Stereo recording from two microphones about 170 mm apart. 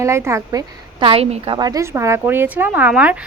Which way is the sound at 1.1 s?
35° right (ahead or behind).